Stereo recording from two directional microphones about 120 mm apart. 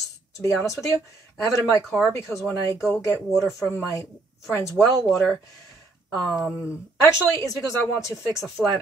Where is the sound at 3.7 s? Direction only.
20° left (ahead or behind).